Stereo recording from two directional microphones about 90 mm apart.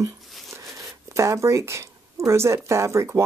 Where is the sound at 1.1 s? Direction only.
35° right (ahead or behind).